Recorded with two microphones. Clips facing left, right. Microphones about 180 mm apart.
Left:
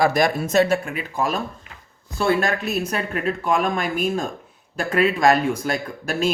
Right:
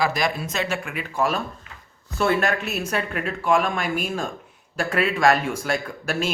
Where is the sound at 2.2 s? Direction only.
35° left (ahead or behind).